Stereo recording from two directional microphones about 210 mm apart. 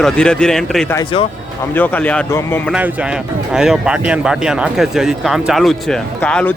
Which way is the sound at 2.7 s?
5° right (ahead or behind).